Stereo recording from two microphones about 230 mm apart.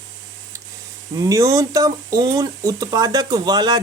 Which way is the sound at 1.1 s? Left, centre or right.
Centre.